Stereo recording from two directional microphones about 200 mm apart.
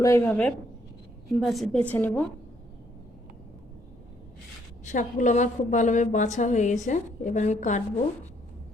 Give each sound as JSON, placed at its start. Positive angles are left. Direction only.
{"t": 0.0, "sound": "a woman's voice", "side_deg": 15}
{"t": 4.9, "sound": "a woman's voice", "side_deg": 40}